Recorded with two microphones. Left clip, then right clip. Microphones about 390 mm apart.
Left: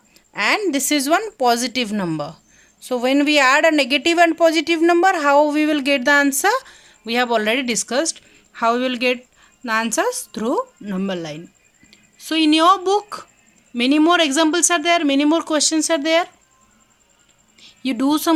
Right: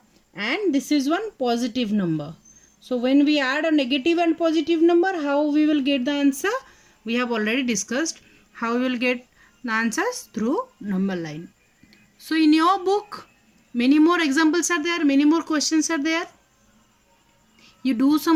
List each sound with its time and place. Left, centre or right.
0.3 s speech: centre
17.6 s speech: centre